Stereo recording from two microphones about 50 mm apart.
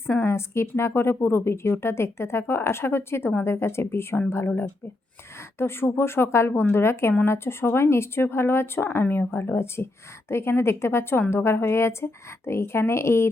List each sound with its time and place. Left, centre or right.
0.2 s a woman's voice: left
5.5 s a woman's voice: left